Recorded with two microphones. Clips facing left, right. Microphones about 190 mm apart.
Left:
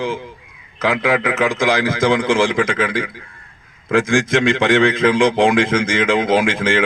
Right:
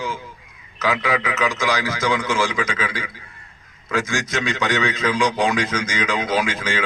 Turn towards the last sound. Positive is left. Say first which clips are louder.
# left 6 dB
turn(degrees=55)  # may be behind; listen again after turning